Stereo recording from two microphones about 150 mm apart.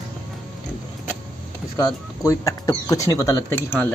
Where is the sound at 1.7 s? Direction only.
20° left (ahead or behind).